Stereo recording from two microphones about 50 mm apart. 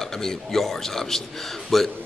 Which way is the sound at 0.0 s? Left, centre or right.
Centre.